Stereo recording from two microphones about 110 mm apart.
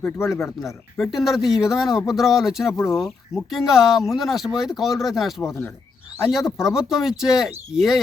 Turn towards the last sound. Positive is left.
turn(degrees=-5)  # may be behind; listen again after turning